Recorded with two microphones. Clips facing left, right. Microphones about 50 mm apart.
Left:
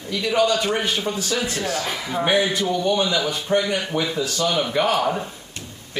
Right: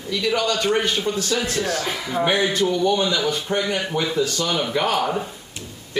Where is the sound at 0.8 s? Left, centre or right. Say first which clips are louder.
Right 2 dB; centre.